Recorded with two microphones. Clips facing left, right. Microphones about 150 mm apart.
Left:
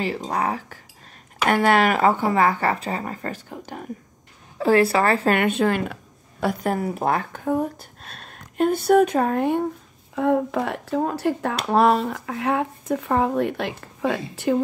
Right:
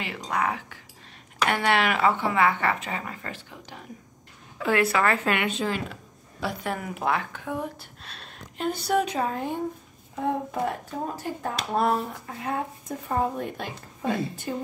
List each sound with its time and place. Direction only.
0.0 s speech: 35° left (ahead or behind)
4.6 s speech: 35° left (ahead or behind)
5.5 s speech: 55° left (ahead or behind)
6.4 s speech: 40° left (ahead or behind); by 9.7 s 65° left (ahead or behind)
10.1 s speech: 75° left (ahead or behind); by 14.6 s 90° left